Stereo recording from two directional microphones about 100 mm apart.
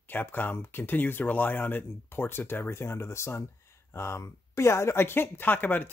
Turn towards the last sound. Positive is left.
turn(degrees=20)  # may be behind; listen again after turning